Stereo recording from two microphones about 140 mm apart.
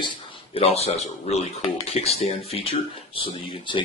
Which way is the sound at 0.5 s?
45° left (ahead or behind).